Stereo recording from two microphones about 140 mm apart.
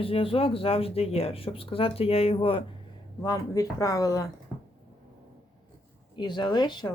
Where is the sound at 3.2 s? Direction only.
25° left (ahead or behind).